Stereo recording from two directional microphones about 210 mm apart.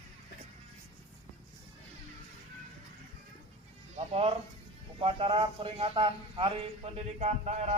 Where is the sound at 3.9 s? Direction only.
30° right (ahead or behind).